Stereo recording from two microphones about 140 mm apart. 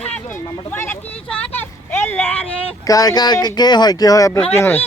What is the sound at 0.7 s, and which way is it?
Vehicle, 15° left (ahead or behind).